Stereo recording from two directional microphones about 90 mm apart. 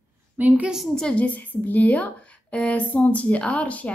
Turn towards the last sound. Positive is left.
turn(degrees=15)  # may be behind; listen again after turning